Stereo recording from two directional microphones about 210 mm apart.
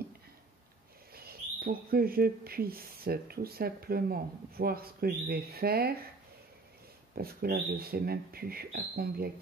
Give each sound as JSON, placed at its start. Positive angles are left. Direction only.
{"t": 1.1, "sound": "speech", "side_deg": -45}
{"t": 7.2, "sound": "speech", "side_deg": -45}